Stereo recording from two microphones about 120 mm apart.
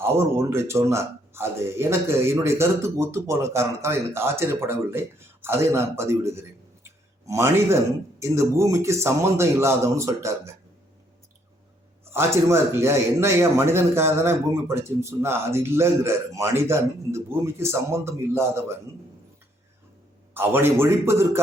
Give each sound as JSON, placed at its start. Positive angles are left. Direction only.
{"t": 0.0, "sound": "speech", "side_deg": -20}
{"t": 12.1, "sound": "speech", "side_deg": -20}
{"t": 20.3, "sound": "speech", "side_deg": -20}